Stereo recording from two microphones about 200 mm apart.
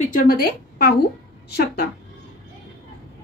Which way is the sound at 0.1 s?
45° left (ahead or behind).